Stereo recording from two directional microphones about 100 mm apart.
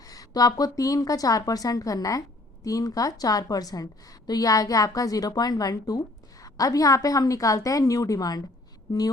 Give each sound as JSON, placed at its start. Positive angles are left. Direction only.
{"t": 0.0, "sound": "a woman's voice", "side_deg": 35}